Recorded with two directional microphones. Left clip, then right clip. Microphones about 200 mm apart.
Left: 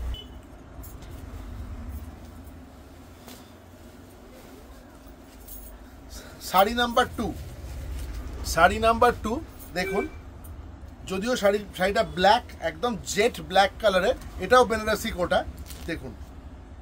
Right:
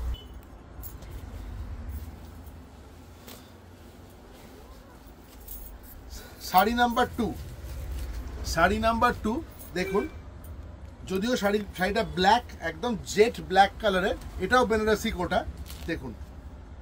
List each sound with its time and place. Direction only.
6.1 s speech: 20° left (ahead or behind)
8.5 s speech: 30° left (ahead or behind)
11.1 s speech: 25° left (ahead or behind)